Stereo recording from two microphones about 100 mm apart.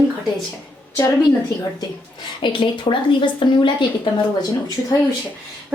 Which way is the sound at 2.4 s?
55° left (ahead or behind).